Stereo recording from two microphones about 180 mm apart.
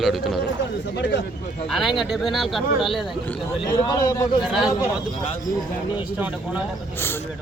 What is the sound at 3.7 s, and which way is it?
Speech, 20° left (ahead or behind).